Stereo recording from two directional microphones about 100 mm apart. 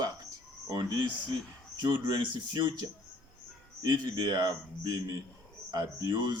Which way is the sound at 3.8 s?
45° right (ahead or behind).